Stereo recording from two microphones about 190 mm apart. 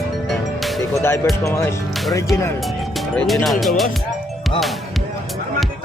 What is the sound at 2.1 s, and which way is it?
Speech, 15° left (ahead or behind).